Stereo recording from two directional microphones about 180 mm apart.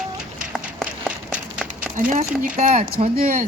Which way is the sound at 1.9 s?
45° right (ahead or behind).